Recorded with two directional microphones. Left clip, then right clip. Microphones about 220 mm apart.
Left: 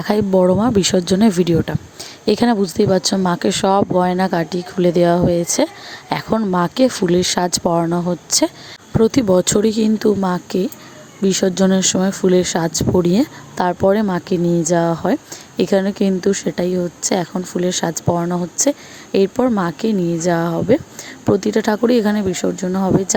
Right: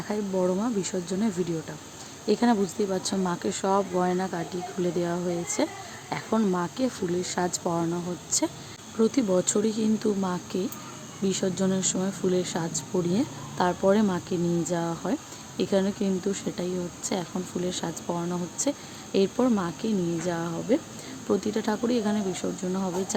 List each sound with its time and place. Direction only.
0.0 s speech: 40° left (ahead or behind)